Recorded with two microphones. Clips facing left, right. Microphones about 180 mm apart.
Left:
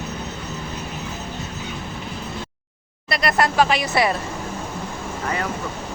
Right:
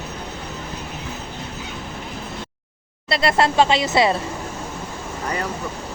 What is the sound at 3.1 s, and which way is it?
Speech, 25° right (ahead or behind).